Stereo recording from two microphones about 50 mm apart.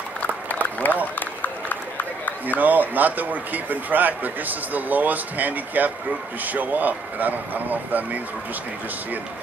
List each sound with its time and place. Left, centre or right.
0.2 s a sound: left
1.4 s run: left
2.4 s speech: right